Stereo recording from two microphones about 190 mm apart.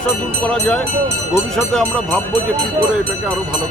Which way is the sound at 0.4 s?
5° left (ahead or behind).